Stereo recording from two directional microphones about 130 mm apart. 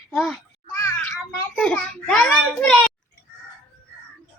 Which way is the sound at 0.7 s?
15° left (ahead or behind).